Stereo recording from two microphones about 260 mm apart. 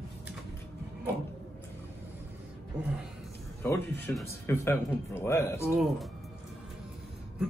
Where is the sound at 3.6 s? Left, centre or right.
Centre.